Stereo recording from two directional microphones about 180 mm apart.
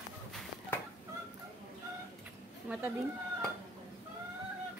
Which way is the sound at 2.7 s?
10° right (ahead or behind).